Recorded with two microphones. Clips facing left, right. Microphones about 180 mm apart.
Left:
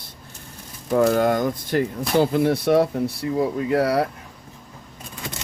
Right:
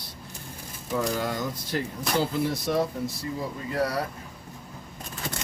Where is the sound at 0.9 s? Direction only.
55° left (ahead or behind).